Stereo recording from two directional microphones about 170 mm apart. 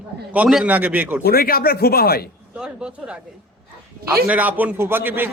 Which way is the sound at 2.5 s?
5° right (ahead or behind).